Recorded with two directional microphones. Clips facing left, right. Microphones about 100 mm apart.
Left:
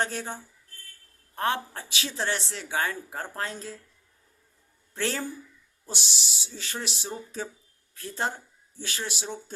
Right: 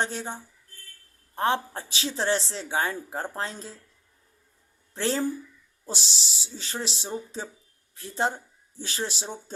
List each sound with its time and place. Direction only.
0.0 s a man's voice: 25° right (ahead or behind)
1.4 s a man's voice: 30° right (ahead or behind)
4.9 s a man's voice: 25° right (ahead or behind)